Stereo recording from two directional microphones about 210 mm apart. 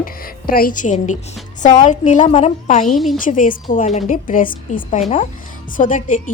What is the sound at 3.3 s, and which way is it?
A woman's voice, 40° left (ahead or behind).